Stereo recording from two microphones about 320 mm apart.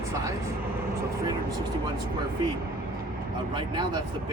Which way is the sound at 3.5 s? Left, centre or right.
Centre.